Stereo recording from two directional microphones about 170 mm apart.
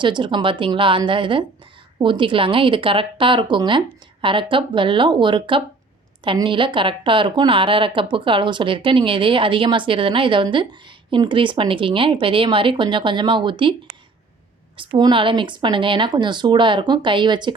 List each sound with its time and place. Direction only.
0.0 s a woman's voice: 30° right (ahead or behind)
14.8 s a woman's voice: 25° right (ahead or behind)